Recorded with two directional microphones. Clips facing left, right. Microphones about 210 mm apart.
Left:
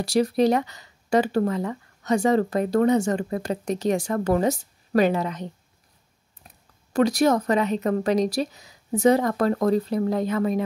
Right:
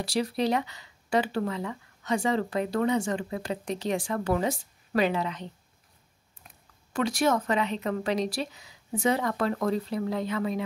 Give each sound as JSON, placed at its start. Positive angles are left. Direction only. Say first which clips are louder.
{"t": 0.0, "sound": "speech", "louder": "left 7 dB", "side_deg": 45}